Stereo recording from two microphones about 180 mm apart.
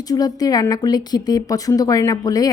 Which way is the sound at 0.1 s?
20° left (ahead or behind).